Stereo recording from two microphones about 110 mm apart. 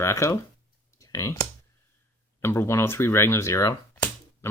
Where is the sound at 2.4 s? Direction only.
20° left (ahead or behind).